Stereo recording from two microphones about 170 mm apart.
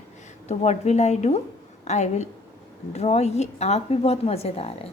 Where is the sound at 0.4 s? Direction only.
40° left (ahead or behind).